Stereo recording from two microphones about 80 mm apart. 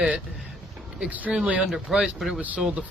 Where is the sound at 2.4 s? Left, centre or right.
Centre.